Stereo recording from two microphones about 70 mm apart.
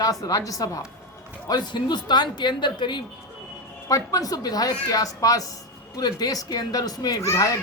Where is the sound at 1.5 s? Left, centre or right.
Left.